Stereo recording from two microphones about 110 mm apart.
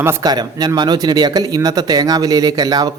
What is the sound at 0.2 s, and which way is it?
A man's voice, 40° right (ahead or behind).